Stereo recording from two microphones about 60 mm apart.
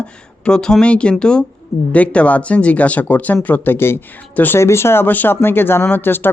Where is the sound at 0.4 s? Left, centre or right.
Centre.